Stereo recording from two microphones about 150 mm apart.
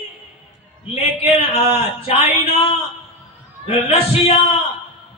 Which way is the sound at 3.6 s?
45° left (ahead or behind).